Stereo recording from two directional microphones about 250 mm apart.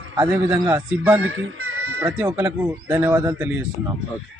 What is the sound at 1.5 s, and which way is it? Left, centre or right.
Music, right.